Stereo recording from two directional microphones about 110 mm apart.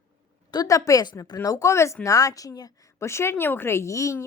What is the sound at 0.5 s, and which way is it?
A woman's voice, 35° left (ahead or behind).